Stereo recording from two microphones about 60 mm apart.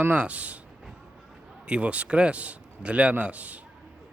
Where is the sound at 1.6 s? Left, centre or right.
Centre.